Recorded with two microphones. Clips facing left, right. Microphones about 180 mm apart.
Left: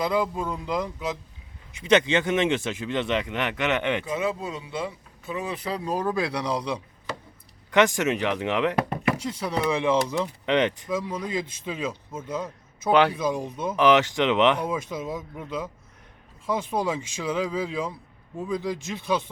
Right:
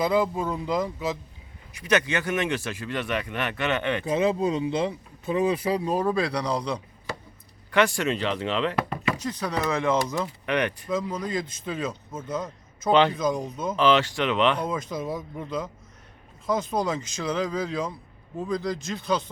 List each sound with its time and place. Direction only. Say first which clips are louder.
0.0 s a man's voice: right 2 dB; 5° right (ahead or behind)
1.8 s speech: left 4 dB; 25° left (ahead or behind)
4.1 s speech: right 5 dB; 25° right (ahead or behind)
5.9 s a man's voice: left 2 dB; centre (ahead or behind)
7.7 s speech: left 2 dB; 15° left (ahead or behind)
10.8 s speech: right 1 dB; 5° left (ahead or behind)
16.8 s speech: even; 10° left (ahead or behind)